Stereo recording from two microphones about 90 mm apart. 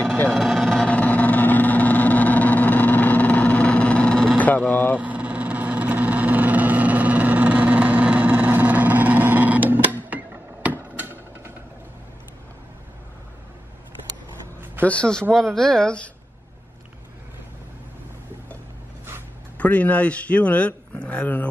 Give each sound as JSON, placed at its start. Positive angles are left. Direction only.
{"t": 0.3, "sound": "vehicle", "side_deg": 0}
{"t": 4.9, "sound": "vehicle", "side_deg": -15}
{"t": 14.9, "sound": "speech", "side_deg": 10}
{"t": 19.6, "sound": "speech", "side_deg": 15}